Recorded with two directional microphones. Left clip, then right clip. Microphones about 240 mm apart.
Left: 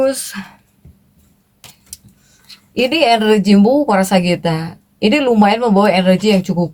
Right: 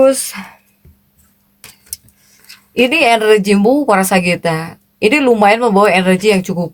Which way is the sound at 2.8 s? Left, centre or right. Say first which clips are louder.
Right 2 dB; right.